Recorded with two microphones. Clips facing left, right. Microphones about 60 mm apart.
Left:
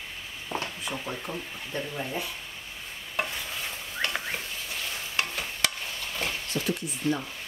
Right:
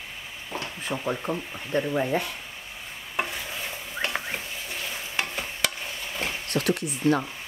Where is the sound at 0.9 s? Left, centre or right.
Right.